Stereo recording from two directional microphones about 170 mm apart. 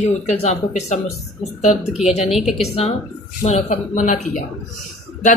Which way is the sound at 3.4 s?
45° left (ahead or behind).